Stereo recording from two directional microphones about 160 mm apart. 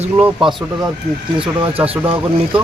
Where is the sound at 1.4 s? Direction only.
35° right (ahead or behind).